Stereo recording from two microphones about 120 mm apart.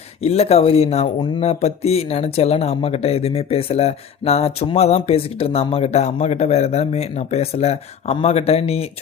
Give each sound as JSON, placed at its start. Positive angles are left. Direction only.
{"t": 0.2, "sound": "speech", "side_deg": 60}
{"t": 1.4, "sound": "speech", "side_deg": 60}